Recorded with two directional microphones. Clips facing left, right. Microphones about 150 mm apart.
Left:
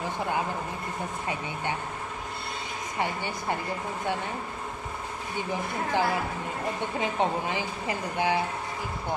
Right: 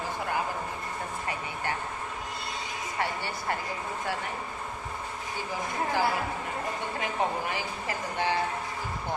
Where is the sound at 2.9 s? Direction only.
15° left (ahead or behind).